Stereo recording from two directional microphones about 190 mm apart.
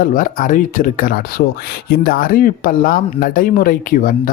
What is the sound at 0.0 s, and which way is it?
Speech, 45° left (ahead or behind).